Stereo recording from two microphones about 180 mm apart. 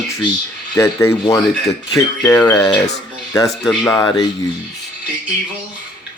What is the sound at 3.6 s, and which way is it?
Speech, centre (ahead or behind).